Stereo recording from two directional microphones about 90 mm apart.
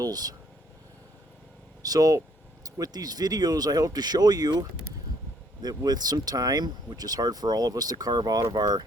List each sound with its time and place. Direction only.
0.0 s speech: 45° right (ahead or behind)
1.8 s speech: 40° right (ahead or behind)
5.6 s speech: 45° right (ahead or behind)